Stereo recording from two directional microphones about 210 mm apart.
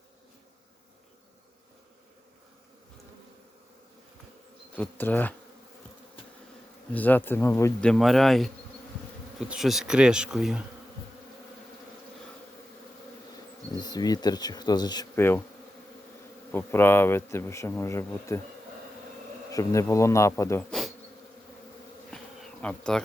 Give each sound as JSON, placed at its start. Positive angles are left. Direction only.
{"t": 4.7, "sound": "speech", "side_deg": 10}
{"t": 6.9, "sound": "speech", "side_deg": 10}
{"t": 13.7, "sound": "bee", "side_deg": 20}
{"t": 16.5, "sound": "speech", "side_deg": 10}
{"t": 19.5, "sound": "speech", "side_deg": 15}
{"t": 22.1, "sound": "bee", "side_deg": 5}